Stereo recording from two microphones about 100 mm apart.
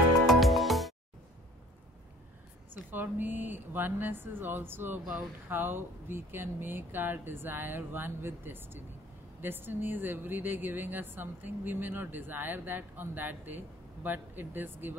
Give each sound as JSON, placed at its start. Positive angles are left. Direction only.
{"t": 0.3, "sound": "music", "side_deg": 0}
{"t": 2.7, "sound": "speech", "side_deg": -20}